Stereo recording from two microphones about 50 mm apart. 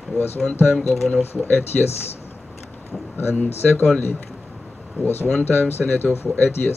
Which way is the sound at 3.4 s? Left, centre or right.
Left.